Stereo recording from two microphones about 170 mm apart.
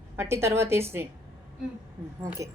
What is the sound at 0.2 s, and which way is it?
Speech, 15° right (ahead or behind).